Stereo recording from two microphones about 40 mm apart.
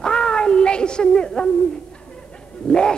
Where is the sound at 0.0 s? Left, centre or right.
Left.